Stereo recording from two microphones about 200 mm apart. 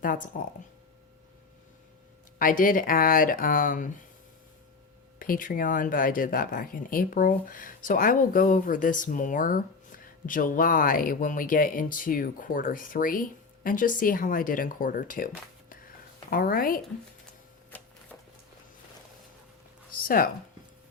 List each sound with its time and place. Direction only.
0.0 s speech: 40° left (ahead or behind)
2.4 s speech: 45° left (ahead or behind)
5.2 s speech: 45° left (ahead or behind)
16.3 s speech: 45° left (ahead or behind)
19.9 s speech: 45° left (ahead or behind)